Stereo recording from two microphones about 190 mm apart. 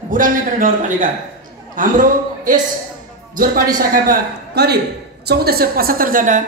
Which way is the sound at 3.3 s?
45° right (ahead or behind).